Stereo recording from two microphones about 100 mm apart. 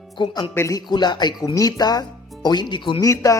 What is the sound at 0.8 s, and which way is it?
Speech, 50° left (ahead or behind).